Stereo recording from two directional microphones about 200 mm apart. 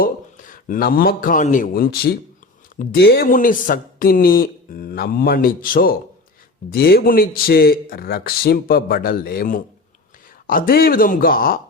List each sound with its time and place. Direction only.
0.0 s speech: 45° left (ahead or behind)